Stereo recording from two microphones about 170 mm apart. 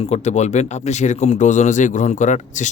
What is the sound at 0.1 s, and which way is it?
Speech, 40° left (ahead or behind).